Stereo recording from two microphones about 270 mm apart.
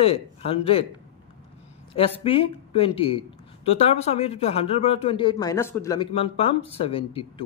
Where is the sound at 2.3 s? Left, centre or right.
Centre.